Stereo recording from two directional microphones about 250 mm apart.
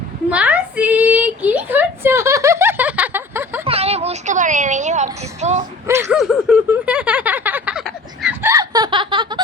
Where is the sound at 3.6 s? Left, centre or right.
Right.